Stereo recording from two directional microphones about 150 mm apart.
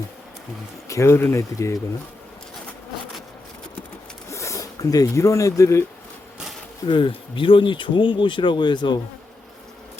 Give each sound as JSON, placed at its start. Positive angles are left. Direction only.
{"t": 0.9, "sound": "speech", "side_deg": 20}
{"t": 4.3, "sound": "speech", "side_deg": 20}
{"t": 6.8, "sound": "speech", "side_deg": 35}